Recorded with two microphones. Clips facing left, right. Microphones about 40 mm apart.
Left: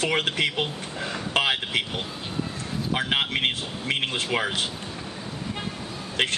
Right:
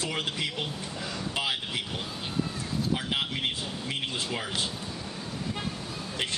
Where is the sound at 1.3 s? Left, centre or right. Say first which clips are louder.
Left 8 dB; left.